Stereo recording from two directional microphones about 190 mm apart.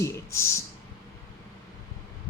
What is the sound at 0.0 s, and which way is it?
Speech, 15° left (ahead or behind).